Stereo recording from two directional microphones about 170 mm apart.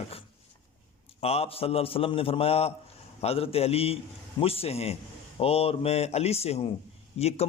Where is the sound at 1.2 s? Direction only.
35° left (ahead or behind).